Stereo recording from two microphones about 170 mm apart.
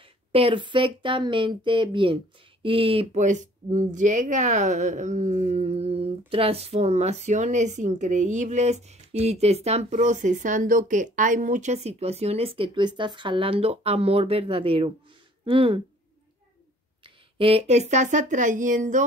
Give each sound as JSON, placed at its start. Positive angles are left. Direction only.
{"t": 0.0, "sound": "speech", "side_deg": -35}
{"t": 17.0, "sound": "speech", "side_deg": -35}